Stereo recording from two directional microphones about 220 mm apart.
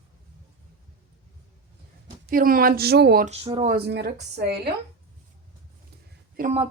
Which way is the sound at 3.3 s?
25° right (ahead or behind).